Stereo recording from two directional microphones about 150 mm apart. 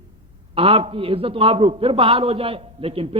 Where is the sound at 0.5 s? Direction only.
35° right (ahead or behind).